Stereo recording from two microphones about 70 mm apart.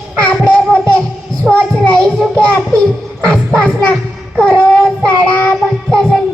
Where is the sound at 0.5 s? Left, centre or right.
Centre.